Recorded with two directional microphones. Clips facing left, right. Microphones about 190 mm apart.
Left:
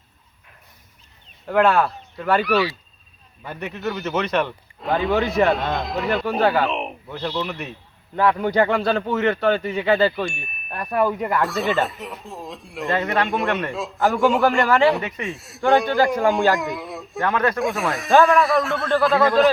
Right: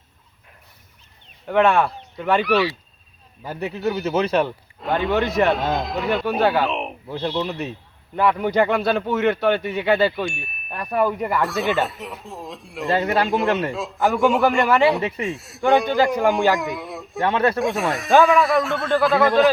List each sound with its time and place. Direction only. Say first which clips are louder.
1.5 s chime: even; 5° left (ahead or behind)
3.8 s speech: right 3 dB; 10° right (ahead or behind)
4.1 s speech: right 2 dB; 30° right (ahead or behind)
4.4 s chime: even; centre (ahead or behind)
7.1 s speech: right 3 dB; 25° right (ahead or behind)
8.1 s speech: even; 10° right (ahead or behind)
9.6 s chime: even; 5° right (ahead or behind)
12.9 s speech: right 2 dB; 30° right (ahead or behind)
13.2 s chime: right 3 dB; centre (ahead or behind)
17.2 s speech: right 2 dB; 30° right (ahead or behind)
17.6 s chime: right 1 dB; centre (ahead or behind)